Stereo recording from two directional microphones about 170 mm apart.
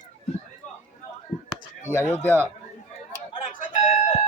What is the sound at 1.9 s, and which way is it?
Speech, 15° left (ahead or behind).